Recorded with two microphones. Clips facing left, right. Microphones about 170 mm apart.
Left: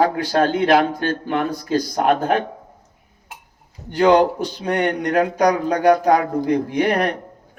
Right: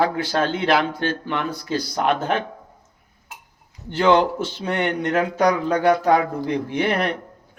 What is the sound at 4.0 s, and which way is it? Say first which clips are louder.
Speech: left 3 dB; 40° left (ahead or behind).